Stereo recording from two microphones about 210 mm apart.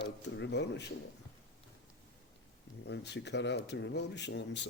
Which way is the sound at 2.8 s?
55° left (ahead or behind).